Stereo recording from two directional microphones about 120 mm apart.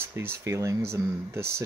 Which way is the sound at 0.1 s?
20° right (ahead or behind).